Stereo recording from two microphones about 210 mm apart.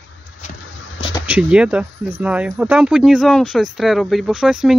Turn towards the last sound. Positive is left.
turn(degrees=-5)  # may be behind; listen again after turning